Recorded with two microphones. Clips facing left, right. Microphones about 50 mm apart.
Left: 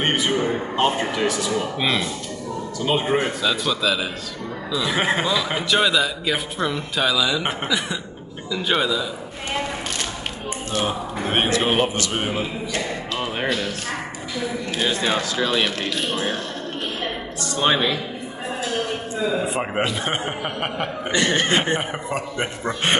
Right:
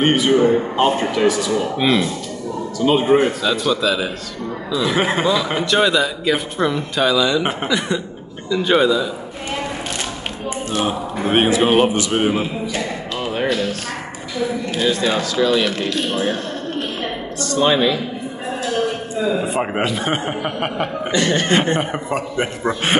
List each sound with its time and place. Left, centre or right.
0.0 s a man's voice: centre
10.7 s a man's voice: centre
14.8 s speech: left
17.6 s speech: centre
19.4 s a man's voice: centre
21.1 s speech: centre
21.9 s a man's voice: centre